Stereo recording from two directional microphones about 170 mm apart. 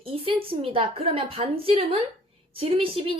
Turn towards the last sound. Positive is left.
turn(degrees=-30)  # may be behind; listen again after turning